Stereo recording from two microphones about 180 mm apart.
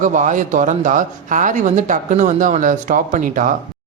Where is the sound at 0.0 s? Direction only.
45° right (ahead or behind).